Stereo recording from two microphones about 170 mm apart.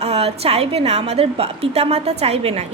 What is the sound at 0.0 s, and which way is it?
A woman's voice, 35° right (ahead or behind).